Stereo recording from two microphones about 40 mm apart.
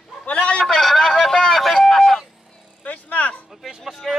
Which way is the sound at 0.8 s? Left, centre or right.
Centre.